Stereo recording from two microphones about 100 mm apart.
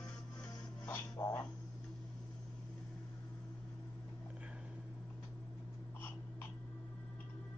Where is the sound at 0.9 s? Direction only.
30° left (ahead or behind).